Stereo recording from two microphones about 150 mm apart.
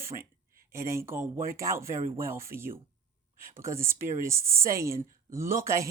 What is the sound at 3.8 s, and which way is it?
Speech, 15° right (ahead or behind).